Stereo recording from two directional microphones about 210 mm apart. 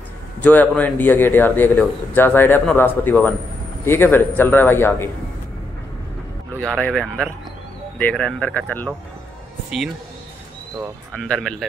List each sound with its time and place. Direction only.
0.4 s a man's voice: 5° left (ahead or behind)
6.6 s a man's voice: 5° left (ahead or behind)
11.1 s speech: 5° left (ahead or behind)